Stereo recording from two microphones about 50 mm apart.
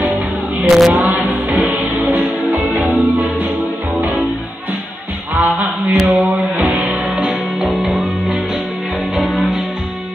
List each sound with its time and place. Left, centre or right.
0.7 s a sound: centre
0.9 s music: right
5.3 s music: right
6.9 s music: right
7.2 s music: centre
9.1 s music: centre